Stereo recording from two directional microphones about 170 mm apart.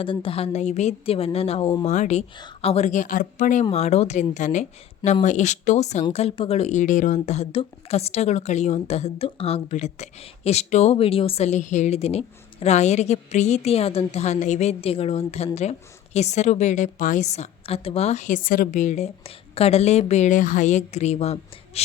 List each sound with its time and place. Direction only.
0.0 s a woman's voice: 30° left (ahead or behind)